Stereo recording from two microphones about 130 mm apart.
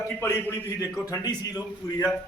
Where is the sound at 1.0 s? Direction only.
25° left (ahead or behind).